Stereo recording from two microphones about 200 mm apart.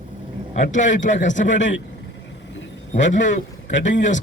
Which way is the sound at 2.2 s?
65° left (ahead or behind).